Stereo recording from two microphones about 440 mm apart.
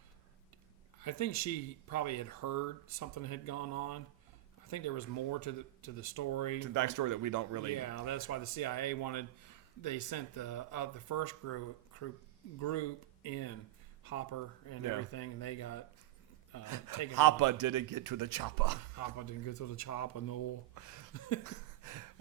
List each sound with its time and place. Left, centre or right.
1.0 s speech: left
6.6 s speech: right
7.8 s speech: left
16.6 s a man's voice: right
18.9 s speech: left
21.4 s a sound: right